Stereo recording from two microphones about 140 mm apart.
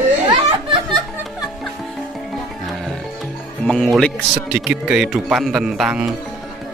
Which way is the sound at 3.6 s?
Centre (ahead or behind).